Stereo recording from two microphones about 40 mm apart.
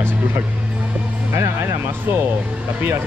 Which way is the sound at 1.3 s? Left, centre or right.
Right.